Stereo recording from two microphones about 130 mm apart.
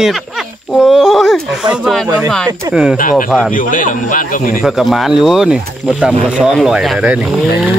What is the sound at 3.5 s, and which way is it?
A man's voice, 90° left.